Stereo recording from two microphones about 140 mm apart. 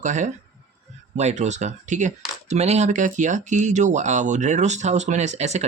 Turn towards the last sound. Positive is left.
turn(degrees=-55)  # may be behind; listen again after turning